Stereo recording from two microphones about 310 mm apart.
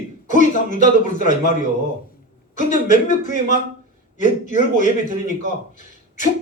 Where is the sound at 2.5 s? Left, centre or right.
Left.